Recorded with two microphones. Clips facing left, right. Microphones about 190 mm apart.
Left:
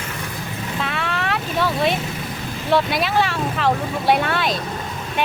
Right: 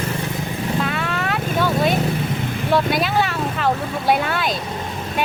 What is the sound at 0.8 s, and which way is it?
Vehicle, centre (ahead or behind).